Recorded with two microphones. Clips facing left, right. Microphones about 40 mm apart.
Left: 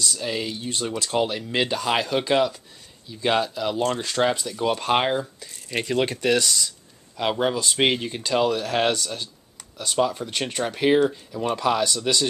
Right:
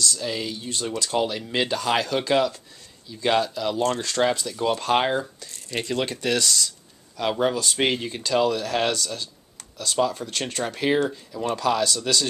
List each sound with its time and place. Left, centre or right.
0.0 s speech: centre
11.4 s speech: centre